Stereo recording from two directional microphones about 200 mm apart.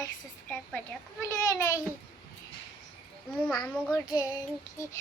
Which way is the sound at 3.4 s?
5° left (ahead or behind).